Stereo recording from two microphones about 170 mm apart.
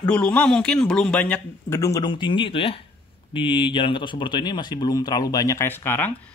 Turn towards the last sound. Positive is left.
turn(degrees=10)  # may be behind; listen again after turning